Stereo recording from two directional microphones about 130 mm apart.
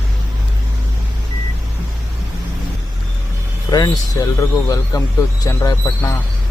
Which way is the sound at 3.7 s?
30° left (ahead or behind).